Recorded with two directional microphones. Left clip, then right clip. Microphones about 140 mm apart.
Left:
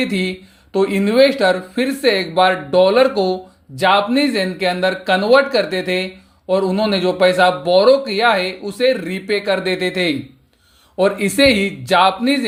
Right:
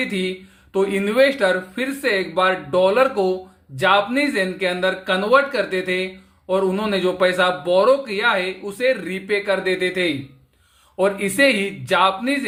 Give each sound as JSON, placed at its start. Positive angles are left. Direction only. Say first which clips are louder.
{"t": 0.1, "sound": "a man's voice", "louder": "left 3 dB", "side_deg": 30}